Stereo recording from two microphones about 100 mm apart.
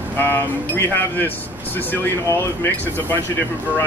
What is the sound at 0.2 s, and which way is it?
Speech, 20° left (ahead or behind).